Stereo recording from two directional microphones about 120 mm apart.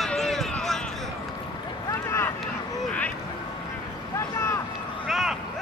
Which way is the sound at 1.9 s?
20° left (ahead or behind).